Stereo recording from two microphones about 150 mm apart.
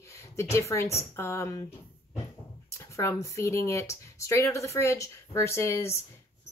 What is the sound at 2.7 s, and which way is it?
A woman's voice, 20° left (ahead or behind).